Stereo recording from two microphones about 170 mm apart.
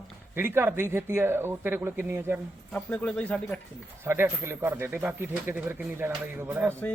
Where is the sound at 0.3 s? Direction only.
15° right (ahead or behind).